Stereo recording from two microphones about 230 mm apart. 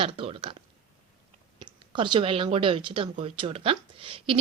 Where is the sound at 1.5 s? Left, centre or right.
Centre.